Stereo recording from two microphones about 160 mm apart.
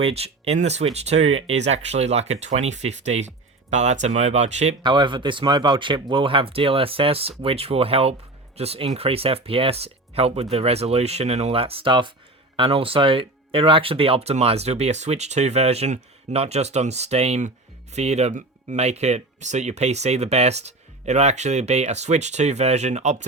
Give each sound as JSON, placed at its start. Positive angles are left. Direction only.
{"t": 0.0, "sound": "speech", "side_deg": -40}
{"t": 4.8, "sound": "speech", "side_deg": -30}